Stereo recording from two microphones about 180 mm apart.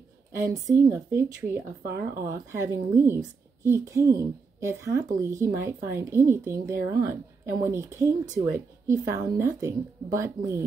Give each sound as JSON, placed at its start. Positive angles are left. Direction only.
{"t": 0.4, "sound": "speech", "side_deg": -20}
{"t": 1.8, "sound": "speech", "side_deg": -55}
{"t": 2.5, "sound": "speech", "side_deg": -15}